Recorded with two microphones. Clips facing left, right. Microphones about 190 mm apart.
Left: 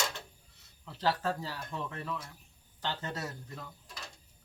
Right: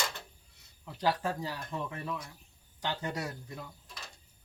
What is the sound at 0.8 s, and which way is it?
Speech, 15° right (ahead or behind).